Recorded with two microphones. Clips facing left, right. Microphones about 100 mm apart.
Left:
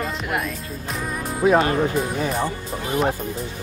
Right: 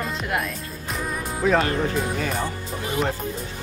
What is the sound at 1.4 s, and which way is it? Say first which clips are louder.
Speech: left 3 dB; 20° left (ahead or behind).